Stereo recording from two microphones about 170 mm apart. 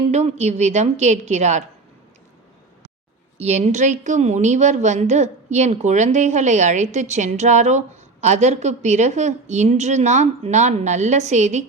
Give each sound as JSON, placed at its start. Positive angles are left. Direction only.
{"t": 0.0, "sound": "a woman's voice", "side_deg": -40}
{"t": 3.3, "sound": "a woman's voice", "side_deg": -40}